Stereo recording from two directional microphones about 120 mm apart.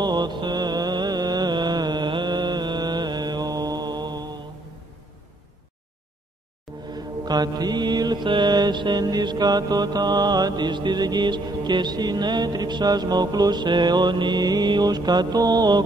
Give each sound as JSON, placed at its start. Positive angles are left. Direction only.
{"t": 0.0, "sound": "mantra", "side_deg": -35}
{"t": 6.9, "sound": "mantra", "side_deg": -35}